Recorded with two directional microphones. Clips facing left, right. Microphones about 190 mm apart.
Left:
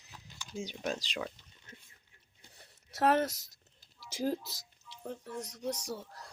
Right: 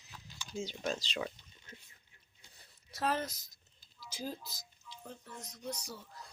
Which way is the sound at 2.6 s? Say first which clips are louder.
Left 7 dB; 75° left (ahead or behind).